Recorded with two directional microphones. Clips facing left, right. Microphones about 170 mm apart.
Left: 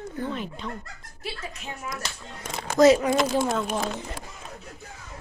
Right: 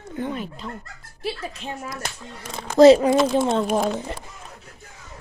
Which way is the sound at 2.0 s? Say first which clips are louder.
Right 3 dB; 50° right (ahead or behind).